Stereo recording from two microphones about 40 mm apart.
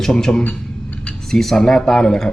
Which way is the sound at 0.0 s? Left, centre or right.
Centre.